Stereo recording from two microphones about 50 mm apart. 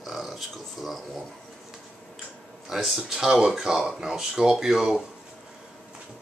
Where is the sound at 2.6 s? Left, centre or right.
Centre.